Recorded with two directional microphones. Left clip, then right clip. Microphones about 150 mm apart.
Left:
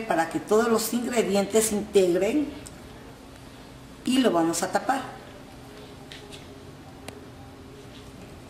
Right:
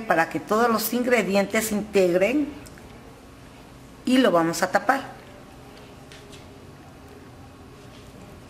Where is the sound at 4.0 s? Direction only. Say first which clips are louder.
Right 3 dB; 25° right (ahead or behind).